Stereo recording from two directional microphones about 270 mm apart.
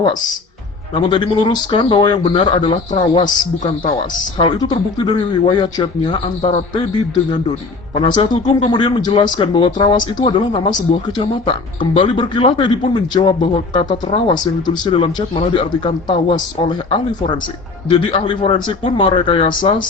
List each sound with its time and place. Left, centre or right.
0.9 s a man's voice: centre
7.9 s a man's voice: centre